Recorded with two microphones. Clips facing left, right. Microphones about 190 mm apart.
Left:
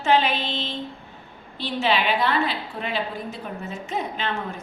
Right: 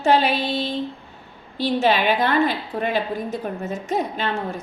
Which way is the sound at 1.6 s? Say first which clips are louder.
Right 4 dB; 40° right (ahead or behind).